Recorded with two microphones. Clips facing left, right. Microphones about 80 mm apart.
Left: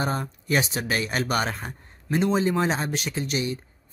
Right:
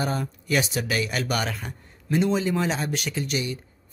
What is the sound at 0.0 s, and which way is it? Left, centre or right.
Speech, left.